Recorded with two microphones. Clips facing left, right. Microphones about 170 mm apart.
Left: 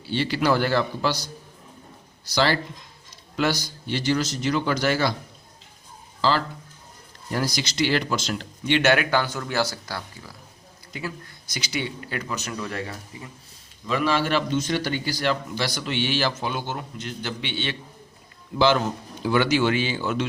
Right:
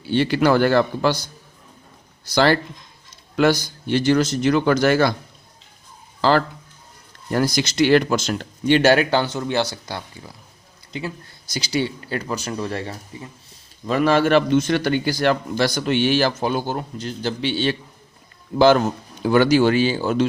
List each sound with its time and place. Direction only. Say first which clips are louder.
0.0 s a man's voice: right 6 dB; 55° right (ahead or behind)
6.2 s speech: right 5 dB; 55° right (ahead or behind); by 10.3 s 20° right (ahead or behind)
11.5 s speech: right 6 dB; 35° right (ahead or behind)
13.8 s a man's voice: right 6 dB; 45° right (ahead or behind)